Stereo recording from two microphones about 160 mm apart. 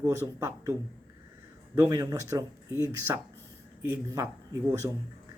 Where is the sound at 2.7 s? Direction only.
15° left (ahead or behind).